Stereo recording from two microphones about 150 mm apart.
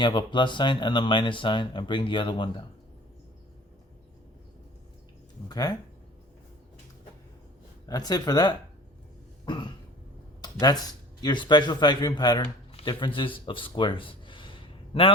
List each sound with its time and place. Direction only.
0.0 s speech: 30° left (ahead or behind)
5.5 s speech: 25° left (ahead or behind)
7.9 s speech: 25° left (ahead or behind)
10.4 s a sound: 25° left (ahead or behind)
10.8 s speech: 30° left (ahead or behind)